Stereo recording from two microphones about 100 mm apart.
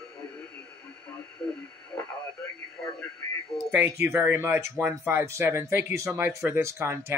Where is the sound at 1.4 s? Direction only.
20° left (ahead or behind).